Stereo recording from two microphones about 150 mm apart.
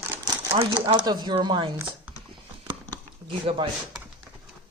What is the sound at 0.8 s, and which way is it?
Speech, 30° right (ahead or behind).